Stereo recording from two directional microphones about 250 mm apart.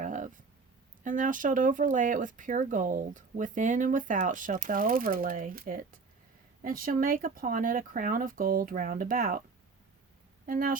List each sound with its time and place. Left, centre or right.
0.0 s a sound: right
1.0 s speech: right
10.4 s speech: right